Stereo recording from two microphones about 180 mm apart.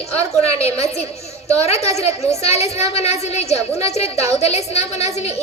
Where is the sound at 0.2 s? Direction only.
35° left (ahead or behind).